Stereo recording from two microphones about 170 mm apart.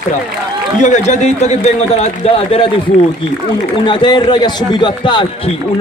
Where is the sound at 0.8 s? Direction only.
45° left (ahead or behind).